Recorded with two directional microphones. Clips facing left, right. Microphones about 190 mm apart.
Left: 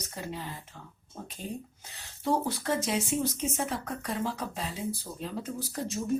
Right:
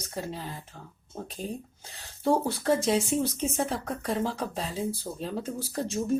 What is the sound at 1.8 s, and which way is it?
A woman's voice, 30° right (ahead or behind).